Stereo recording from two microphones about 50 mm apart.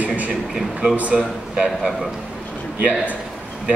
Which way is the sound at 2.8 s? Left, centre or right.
Right.